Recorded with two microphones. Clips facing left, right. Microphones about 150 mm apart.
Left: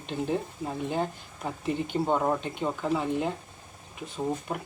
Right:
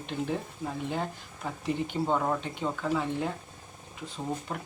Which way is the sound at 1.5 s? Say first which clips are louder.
Left 1 dB; 15° left (ahead or behind).